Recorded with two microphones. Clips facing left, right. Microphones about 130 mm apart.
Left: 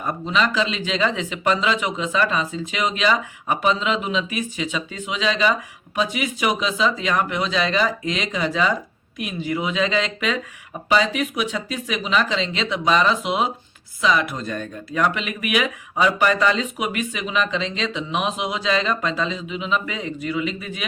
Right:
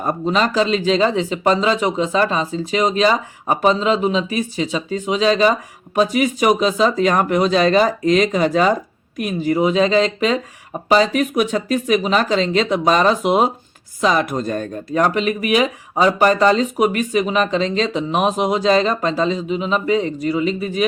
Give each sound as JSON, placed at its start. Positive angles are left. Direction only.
{"t": 0.0, "sound": "speech", "side_deg": -40}